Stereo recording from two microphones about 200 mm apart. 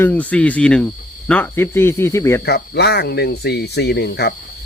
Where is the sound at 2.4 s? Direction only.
55° left (ahead or behind).